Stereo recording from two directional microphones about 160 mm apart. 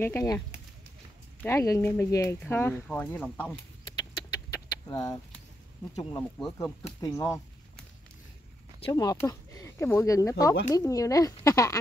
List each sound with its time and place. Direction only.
0.0 s speech: 20° left (ahead or behind)
1.4 s speech: 20° left (ahead or behind)
3.9 s a sound: 25° left (ahead or behind)
6.6 s speech: 20° left (ahead or behind)
8.9 s speech: 20° left (ahead or behind)